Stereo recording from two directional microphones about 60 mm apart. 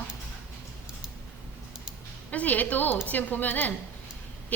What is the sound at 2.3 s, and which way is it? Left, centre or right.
A woman's voice, left.